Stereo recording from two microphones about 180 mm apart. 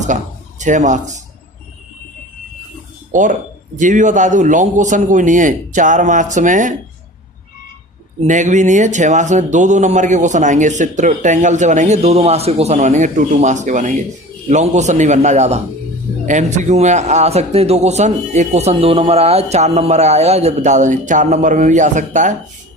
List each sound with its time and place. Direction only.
0.6 s a man's voice: 45° right (ahead or behind)
3.1 s a man's voice: 45° right (ahead or behind)
8.2 s speech: 45° right (ahead or behind)